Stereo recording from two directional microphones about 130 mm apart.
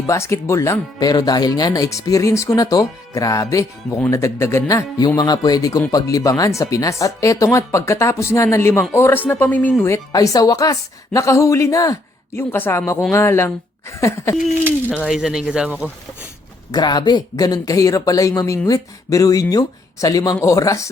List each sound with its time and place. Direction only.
0.1 s speech: 20° left (ahead or behind)
9.8 s speech: 25° left (ahead or behind)
14.9 s speech: 5° right (ahead or behind)
16.7 s speech: 35° left (ahead or behind)